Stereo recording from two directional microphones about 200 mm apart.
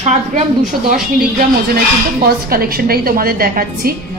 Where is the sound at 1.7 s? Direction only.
50° right (ahead or behind).